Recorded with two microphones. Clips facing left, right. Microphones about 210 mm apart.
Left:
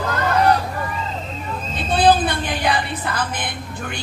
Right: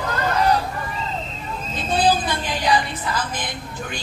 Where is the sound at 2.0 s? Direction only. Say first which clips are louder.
Left 6 dB; 60° left (ahead or behind).